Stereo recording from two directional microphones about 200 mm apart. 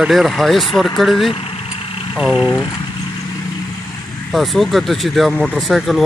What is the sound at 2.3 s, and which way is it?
Speech, 15° left (ahead or behind).